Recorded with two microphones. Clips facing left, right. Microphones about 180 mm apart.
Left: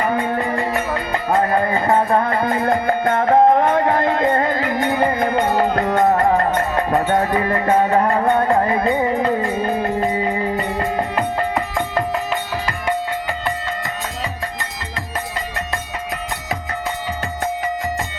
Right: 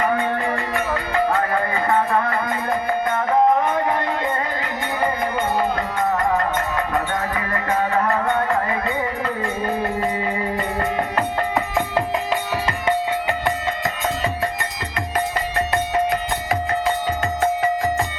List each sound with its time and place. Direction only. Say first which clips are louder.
0.3 s music: left 3 dB; 35° left (ahead or behind)
2.8 s music: left 4 dB; 55° left (ahead or behind)
6.3 s music: left 4 dB; 40° left (ahead or behind)